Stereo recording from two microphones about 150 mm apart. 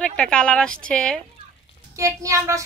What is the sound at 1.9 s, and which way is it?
Speech, 20° right (ahead or behind).